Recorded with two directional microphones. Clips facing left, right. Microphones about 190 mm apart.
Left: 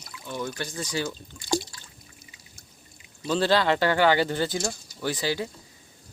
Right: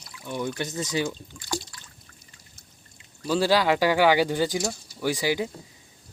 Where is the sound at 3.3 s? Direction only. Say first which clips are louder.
Right 1 dB; 10° right (ahead or behind).